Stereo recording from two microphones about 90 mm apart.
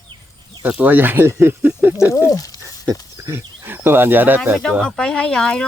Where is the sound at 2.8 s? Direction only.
35° right (ahead or behind).